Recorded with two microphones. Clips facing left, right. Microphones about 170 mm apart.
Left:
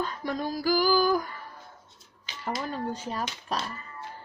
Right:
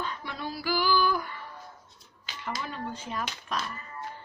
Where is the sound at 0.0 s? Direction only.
40° left (ahead or behind).